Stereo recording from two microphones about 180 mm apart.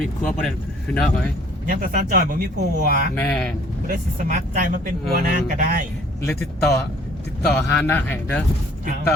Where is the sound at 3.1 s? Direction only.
10° left (ahead or behind).